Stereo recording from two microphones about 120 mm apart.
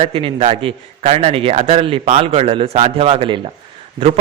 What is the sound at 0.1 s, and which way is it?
Speech, 45° right (ahead or behind).